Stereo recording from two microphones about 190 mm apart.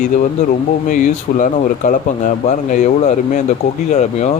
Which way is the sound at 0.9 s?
45° left (ahead or behind).